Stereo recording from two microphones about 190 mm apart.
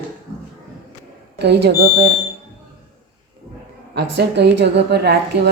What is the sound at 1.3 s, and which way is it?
Speech, 60° right (ahead or behind).